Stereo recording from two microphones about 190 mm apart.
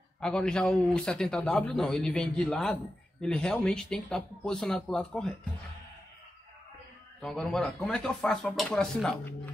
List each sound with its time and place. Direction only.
0.2 s a man's voice: 5° left (ahead or behind)
7.2 s a man's voice: 5° left (ahead or behind)